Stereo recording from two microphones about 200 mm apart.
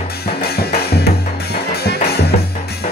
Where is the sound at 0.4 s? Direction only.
50° left (ahead or behind).